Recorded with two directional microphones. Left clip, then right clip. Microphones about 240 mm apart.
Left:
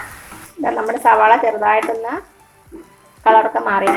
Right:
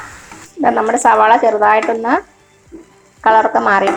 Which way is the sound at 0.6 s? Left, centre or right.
Right.